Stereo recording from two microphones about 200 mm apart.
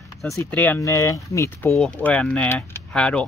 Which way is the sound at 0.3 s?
10° left (ahead or behind).